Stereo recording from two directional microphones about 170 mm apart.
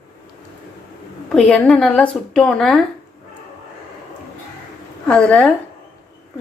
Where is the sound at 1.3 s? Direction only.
5° left (ahead or behind).